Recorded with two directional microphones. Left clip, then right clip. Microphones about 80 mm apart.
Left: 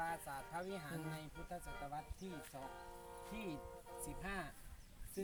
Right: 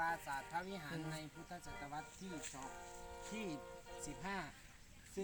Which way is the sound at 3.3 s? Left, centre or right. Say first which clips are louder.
Right 2 dB; left.